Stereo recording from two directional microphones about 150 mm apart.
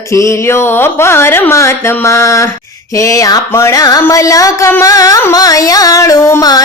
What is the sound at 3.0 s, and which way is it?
Music, 20° left (ahead or behind).